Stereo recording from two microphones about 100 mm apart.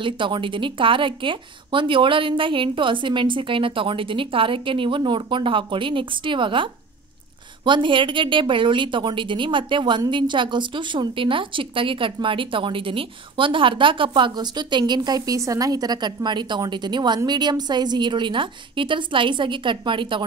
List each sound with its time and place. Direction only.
0.0 s a woman's voice: 55° right (ahead or behind)